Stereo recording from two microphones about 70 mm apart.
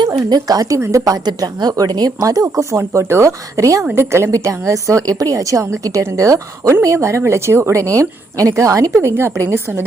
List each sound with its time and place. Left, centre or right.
0.3 s a woman's voice: right
0.8 s a woman's voice: right
2.2 s a woman's voice: right
2.7 s a woman's voice: right